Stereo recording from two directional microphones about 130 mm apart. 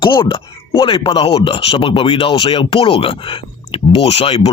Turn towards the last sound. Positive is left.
turn(degrees=50)  # may be behind; listen again after turning